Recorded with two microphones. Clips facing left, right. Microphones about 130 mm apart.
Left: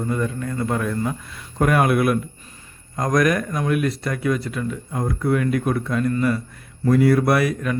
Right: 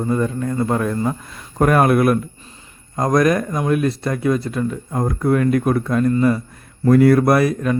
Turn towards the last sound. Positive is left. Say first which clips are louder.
# right 4 dB
turn(degrees=-35)  # may be behind; listen again after turning